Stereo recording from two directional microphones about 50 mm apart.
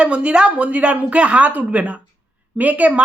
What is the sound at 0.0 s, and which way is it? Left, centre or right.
A woman's voice, right.